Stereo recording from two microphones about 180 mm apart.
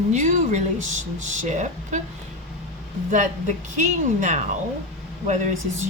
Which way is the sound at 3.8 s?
40° right (ahead or behind).